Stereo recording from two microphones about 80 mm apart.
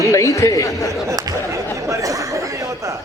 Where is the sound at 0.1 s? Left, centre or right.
Left.